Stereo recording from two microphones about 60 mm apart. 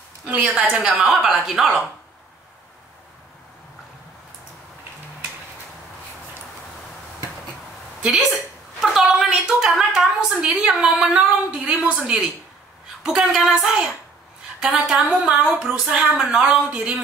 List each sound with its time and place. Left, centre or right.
0.3 s a woman's voice: right
0.8 s a woman's voice: centre
8.0 s a woman's voice: centre
15.0 s a woman's voice: right